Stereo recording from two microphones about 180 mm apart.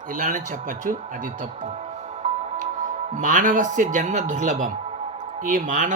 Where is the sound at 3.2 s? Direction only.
45° right (ahead or behind).